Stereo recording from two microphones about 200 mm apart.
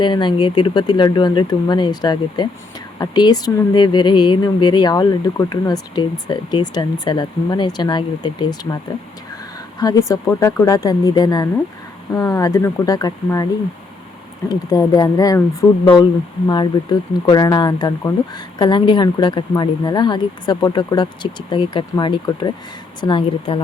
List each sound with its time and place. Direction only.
0.0 s speech: 25° left (ahead or behind)
9.8 s speech: 15° left (ahead or behind)
14.5 s speech: 20° left (ahead or behind)